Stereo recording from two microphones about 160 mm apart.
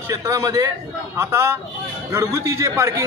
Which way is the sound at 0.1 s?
20° right (ahead or behind).